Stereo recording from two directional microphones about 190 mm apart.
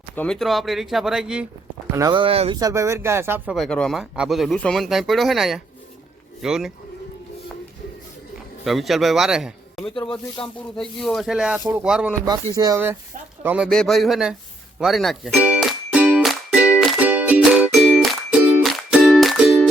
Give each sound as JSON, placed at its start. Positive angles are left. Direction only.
{"t": 0.2, "sound": "speech", "side_deg": 0}
{"t": 1.9, "sound": "speech", "side_deg": -20}
{"t": 2.6, "sound": "speech", "side_deg": -15}
{"t": 3.4, "sound": "speech", "side_deg": 0}
{"t": 8.6, "sound": "speech", "side_deg": 0}
{"t": 10.0, "sound": "speech", "side_deg": 25}
{"t": 10.8, "sound": "speech", "side_deg": 0}
{"t": 12.2, "sound": "speech", "side_deg": -20}
{"t": 14.8, "sound": "music", "side_deg": 0}